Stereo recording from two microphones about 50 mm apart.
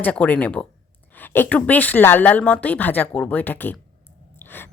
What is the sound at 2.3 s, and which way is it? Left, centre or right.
Speech, left.